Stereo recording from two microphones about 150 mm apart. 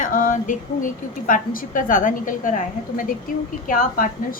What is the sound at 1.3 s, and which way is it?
A woman's voice, 65° left (ahead or behind).